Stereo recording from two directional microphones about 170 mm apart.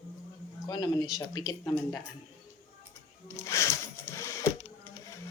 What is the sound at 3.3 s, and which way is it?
Music, 15° left (ahead or behind).